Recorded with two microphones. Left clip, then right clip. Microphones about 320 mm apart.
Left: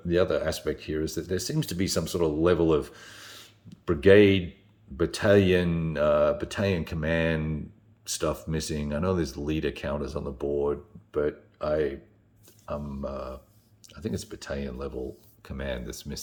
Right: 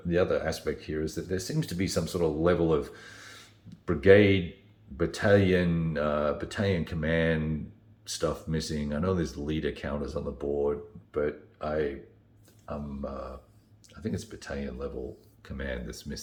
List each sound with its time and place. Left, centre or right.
0.1 s speech: left